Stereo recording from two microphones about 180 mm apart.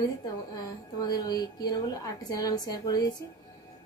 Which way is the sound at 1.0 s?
20° left (ahead or behind).